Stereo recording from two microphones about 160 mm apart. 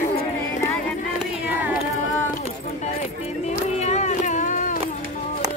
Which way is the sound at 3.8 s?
45° left (ahead or behind).